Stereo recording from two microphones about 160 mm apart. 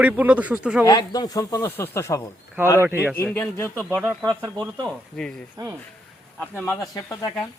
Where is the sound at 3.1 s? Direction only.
15° left (ahead or behind).